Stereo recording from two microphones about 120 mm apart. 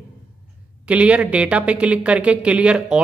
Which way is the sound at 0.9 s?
10° right (ahead or behind).